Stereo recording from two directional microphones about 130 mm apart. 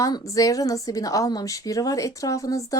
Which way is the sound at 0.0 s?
25° left (ahead or behind).